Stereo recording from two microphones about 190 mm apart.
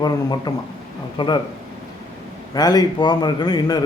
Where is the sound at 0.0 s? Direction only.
20° left (ahead or behind).